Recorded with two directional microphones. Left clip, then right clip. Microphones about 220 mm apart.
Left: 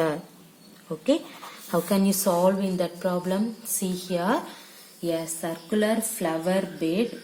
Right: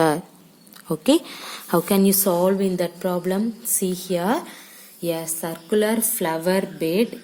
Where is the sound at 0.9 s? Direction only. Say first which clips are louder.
Right 5 dB; 50° right (ahead or behind).